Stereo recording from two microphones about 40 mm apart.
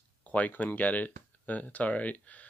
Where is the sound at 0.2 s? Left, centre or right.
Left.